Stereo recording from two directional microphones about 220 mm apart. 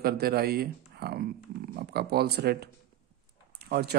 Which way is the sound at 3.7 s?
45° right (ahead or behind).